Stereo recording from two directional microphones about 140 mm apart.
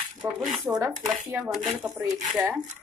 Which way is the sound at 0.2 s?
5° right (ahead or behind).